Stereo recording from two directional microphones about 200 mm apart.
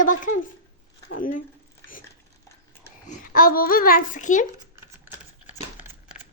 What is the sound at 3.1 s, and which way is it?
A child's voice, 45° left (ahead or behind).